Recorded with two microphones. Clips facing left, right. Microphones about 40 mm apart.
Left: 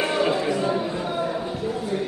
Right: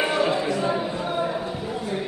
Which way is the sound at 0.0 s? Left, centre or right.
Centre.